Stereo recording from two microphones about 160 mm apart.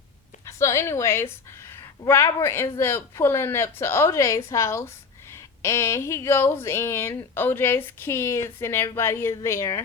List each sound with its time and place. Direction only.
0.4 s a woman's voice: 20° left (ahead or behind)